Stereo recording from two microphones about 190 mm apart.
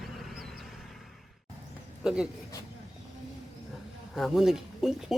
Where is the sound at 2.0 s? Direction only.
5° right (ahead or behind).